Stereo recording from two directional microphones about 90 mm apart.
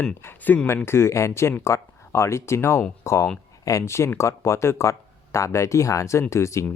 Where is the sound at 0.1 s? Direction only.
25° left (ahead or behind).